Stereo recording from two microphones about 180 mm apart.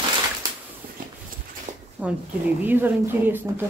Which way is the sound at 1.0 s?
50° right (ahead or behind).